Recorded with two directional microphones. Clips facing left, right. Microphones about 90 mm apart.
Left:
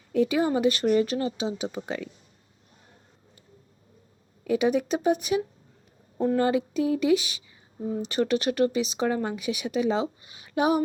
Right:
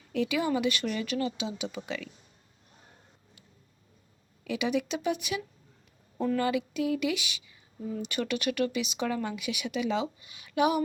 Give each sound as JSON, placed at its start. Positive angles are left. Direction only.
{"t": 0.1, "sound": "speech", "side_deg": 35}
{"t": 4.4, "sound": "speech", "side_deg": 40}